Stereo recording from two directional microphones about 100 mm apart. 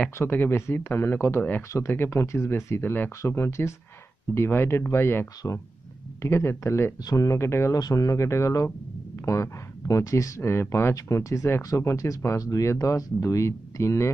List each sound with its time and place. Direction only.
0.2 s speech: 20° left (ahead or behind)